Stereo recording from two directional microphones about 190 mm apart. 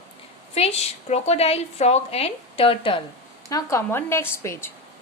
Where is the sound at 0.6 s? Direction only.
35° left (ahead or behind).